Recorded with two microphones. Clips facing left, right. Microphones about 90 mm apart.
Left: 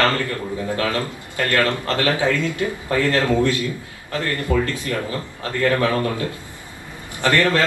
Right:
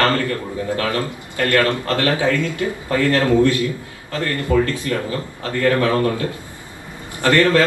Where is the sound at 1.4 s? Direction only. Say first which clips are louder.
Right 2 dB; 25° left (ahead or behind).